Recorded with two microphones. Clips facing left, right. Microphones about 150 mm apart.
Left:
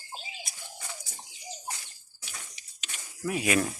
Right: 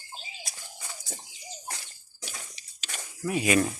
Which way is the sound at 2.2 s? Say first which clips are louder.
Right 4 dB; 35° right (ahead or behind).